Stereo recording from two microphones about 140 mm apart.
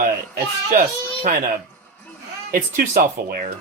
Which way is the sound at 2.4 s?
85° right.